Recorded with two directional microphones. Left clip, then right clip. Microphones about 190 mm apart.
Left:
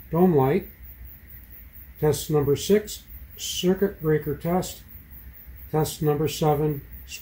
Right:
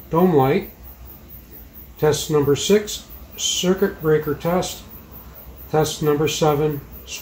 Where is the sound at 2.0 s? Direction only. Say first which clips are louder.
Right 5 dB; 50° left (ahead or behind).